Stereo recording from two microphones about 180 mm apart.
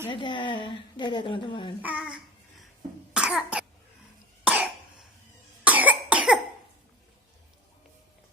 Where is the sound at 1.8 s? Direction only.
5° right (ahead or behind).